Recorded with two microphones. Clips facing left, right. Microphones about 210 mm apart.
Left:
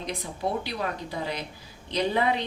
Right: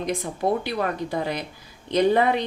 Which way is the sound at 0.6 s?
50° right (ahead or behind).